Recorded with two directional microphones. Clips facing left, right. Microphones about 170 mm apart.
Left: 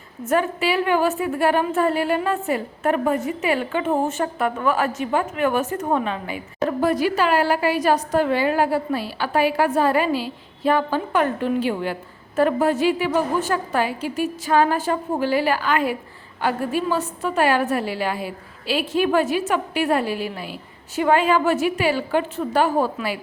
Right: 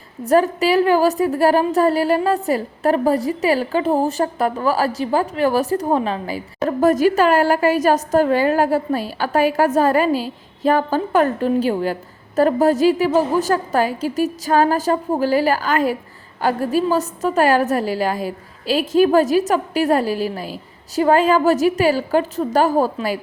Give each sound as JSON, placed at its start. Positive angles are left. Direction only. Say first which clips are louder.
{"t": 0.3, "sound": "a woman's voice", "louder": "right 5 dB", "side_deg": -40}